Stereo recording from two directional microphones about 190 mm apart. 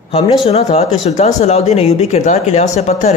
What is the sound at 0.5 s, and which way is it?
A man's voice, 35° left (ahead or behind).